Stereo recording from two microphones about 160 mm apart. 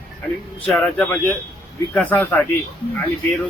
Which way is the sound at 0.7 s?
5° left (ahead or behind).